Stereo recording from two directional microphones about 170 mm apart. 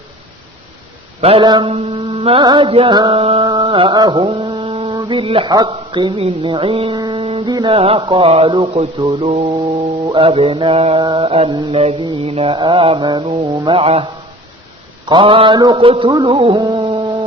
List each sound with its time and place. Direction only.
1.2 s mantra: 30° right (ahead or behind)
3.4 s music: 25° right (ahead or behind)
7.5 s mantra: 30° right (ahead or behind)
15.1 s mantra: 30° right (ahead or behind)